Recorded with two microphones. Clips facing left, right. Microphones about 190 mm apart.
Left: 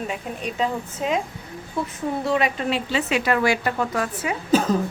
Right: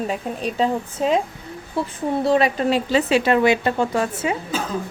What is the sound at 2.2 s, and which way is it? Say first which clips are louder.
Speech: right 5 dB; 35° right (ahead or behind).